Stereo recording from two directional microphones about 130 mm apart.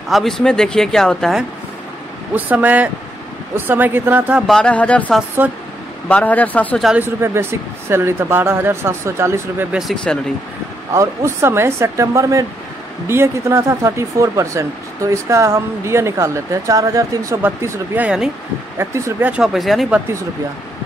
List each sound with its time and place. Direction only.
0.1 s speech: centre (ahead or behind)
2.3 s speech: 10° right (ahead or behind)
4.5 s speech: 5° left (ahead or behind)
7.0 s speech: 20° right (ahead or behind)
9.7 s speech: centre (ahead or behind)
10.9 s speech: 20° right (ahead or behind)
18.8 s speech: 20° right (ahead or behind)
19.3 s speech: centre (ahead or behind)